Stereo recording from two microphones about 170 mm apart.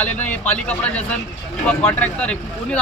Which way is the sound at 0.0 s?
10° left (ahead or behind).